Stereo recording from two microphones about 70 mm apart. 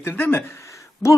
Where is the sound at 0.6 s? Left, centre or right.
Left.